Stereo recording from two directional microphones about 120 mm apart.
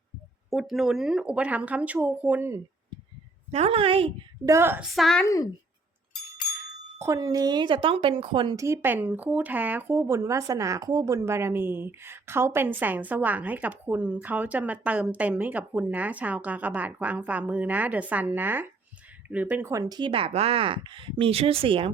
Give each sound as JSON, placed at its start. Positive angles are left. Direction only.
{"t": 0.5, "sound": "speech", "side_deg": -5}
{"t": 3.5, "sound": "speech", "side_deg": -55}
{"t": 4.4, "sound": "speech", "side_deg": -20}
{"t": 4.8, "sound": "a woman's voice", "side_deg": 0}
{"t": 5.2, "sound": "a woman's voice", "side_deg": 30}
{"t": 7.0, "sound": "speech", "side_deg": -25}
{"t": 8.5, "sound": "speech", "side_deg": -25}
{"t": 19.6, "sound": "speech", "side_deg": -25}
{"t": 20.0, "sound": "speech", "side_deg": -50}